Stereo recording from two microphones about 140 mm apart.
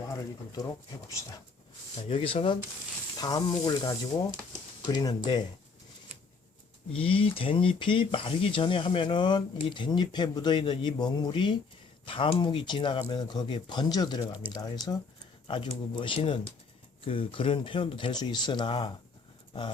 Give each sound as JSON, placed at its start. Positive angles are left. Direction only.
{"t": 0.1, "sound": "speech", "side_deg": 25}
{"t": 2.0, "sound": "speech", "side_deg": 40}
{"t": 3.2, "sound": "speech", "side_deg": 30}
{"t": 7.0, "sound": "speech", "side_deg": 40}